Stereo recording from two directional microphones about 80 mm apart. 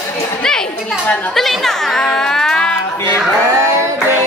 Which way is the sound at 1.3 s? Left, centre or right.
Centre.